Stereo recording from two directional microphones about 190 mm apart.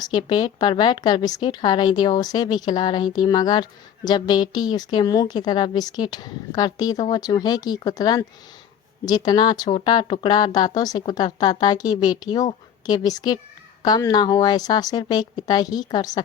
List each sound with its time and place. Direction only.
0.0 s a woman's voice: 20° left (ahead or behind)